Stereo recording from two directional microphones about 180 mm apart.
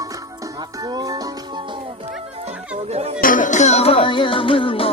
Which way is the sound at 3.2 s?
50° left (ahead or behind).